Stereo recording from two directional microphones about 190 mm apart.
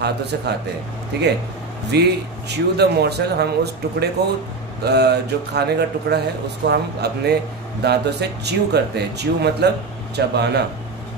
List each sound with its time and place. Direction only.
0.0 s speech: 60° right (ahead or behind)
1.9 s speech: 60° right (ahead or behind)